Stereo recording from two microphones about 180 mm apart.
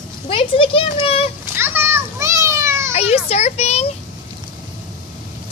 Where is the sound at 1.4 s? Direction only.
10° right (ahead or behind).